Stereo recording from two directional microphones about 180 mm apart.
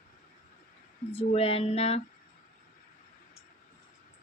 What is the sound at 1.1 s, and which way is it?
Speech, 35° left (ahead or behind).